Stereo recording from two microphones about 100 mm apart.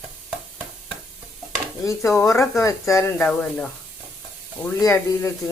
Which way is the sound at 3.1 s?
10° left (ahead or behind).